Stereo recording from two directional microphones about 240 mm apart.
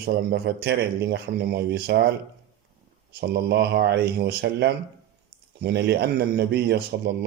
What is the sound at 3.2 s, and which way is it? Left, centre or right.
A man's voice, right.